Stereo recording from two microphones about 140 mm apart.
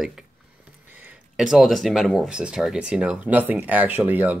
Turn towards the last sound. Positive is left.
turn(degrees=-10)  # may be behind; listen again after turning